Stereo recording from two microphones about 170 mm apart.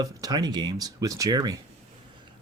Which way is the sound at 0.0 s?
25° right (ahead or behind).